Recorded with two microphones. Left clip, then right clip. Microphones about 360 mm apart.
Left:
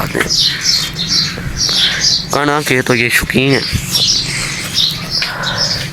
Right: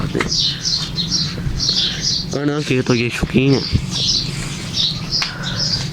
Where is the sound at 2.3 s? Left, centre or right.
Left.